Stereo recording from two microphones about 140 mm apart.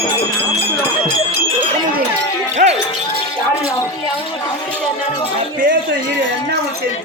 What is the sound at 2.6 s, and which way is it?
Music, 90° right.